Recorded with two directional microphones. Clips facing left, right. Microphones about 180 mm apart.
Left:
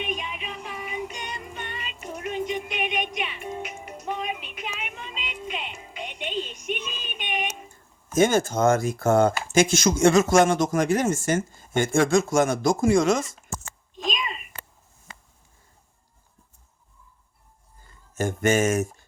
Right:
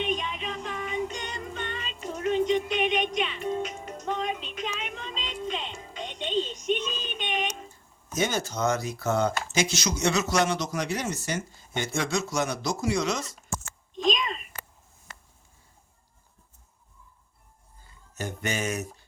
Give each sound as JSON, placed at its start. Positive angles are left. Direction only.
{"t": 0.0, "sound": "music", "side_deg": 10}
{"t": 8.1, "sound": "speech", "side_deg": 50}
{"t": 13.9, "sound": "a sound", "side_deg": 5}
{"t": 18.1, "sound": "speech", "side_deg": 50}